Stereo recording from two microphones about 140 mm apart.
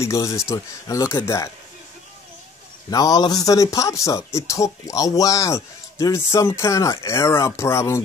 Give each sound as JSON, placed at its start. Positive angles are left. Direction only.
{"t": 0.0, "sound": "speech", "side_deg": 20}
{"t": 2.9, "sound": "speech", "side_deg": 25}